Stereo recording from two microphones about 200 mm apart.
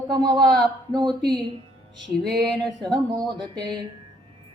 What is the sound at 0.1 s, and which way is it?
Mantra, 20° right (ahead or behind).